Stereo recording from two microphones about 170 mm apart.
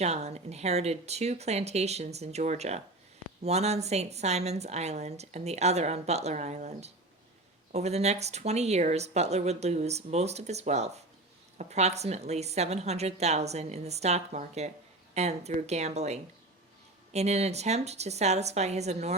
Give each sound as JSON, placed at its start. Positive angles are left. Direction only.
{"t": 0.0, "sound": "a woman's voice", "side_deg": -40}